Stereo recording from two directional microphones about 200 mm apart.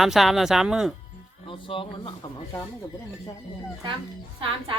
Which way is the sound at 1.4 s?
25° left (ahead or behind).